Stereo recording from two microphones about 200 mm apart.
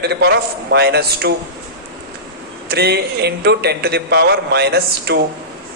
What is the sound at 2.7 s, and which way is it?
A man's voice, 55° right (ahead or behind).